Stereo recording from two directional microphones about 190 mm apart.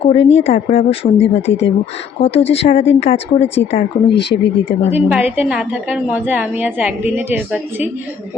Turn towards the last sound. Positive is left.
turn(degrees=-10)  # may be behind; listen again after turning